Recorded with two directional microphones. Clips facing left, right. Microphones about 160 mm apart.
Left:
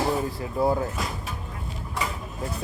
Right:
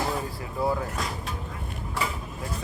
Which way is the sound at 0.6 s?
25° left (ahead or behind).